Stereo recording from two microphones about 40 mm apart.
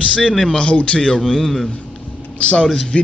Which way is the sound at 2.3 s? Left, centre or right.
Left.